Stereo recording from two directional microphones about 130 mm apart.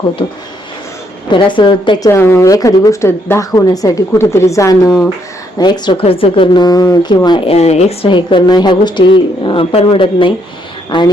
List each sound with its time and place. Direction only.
1.3 s a woman's voice: 40° left (ahead or behind)
2.0 s a woman's voice: 20° left (ahead or behind)
7.3 s speech: 45° left (ahead or behind)
8.1 s a woman's voice: 35° left (ahead or behind)